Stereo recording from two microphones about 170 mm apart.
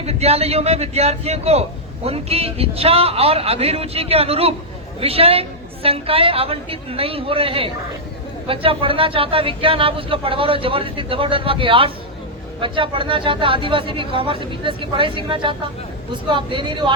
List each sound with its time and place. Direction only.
0.0 s speech: 35° right (ahead or behind)